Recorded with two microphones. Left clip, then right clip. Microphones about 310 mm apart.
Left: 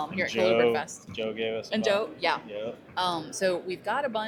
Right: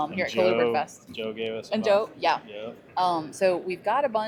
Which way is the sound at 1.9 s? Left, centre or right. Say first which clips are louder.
Right 4 dB; right.